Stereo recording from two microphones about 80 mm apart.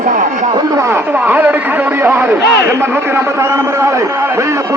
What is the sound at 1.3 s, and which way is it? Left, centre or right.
Speech, right.